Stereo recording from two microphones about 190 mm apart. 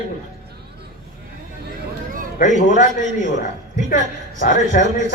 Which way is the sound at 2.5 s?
40° left (ahead or behind).